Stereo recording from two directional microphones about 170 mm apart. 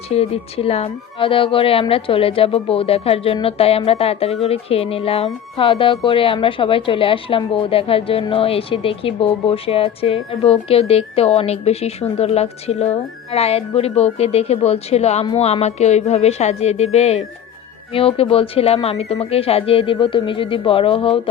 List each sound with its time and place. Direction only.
0.1 s a woman's voice: 35° left (ahead or behind)